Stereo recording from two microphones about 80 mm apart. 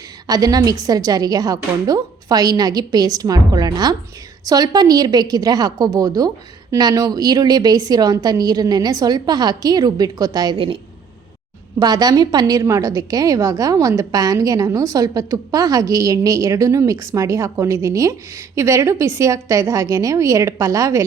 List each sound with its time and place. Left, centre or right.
0.3 s a woman's voice: right
11.8 s a woman's voice: right